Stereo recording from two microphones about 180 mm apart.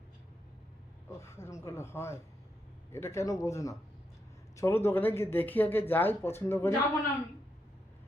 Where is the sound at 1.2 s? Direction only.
15° left (ahead or behind).